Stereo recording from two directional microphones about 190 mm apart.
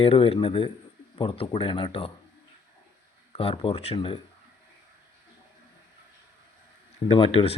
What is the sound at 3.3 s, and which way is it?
Speech, 30° left (ahead or behind).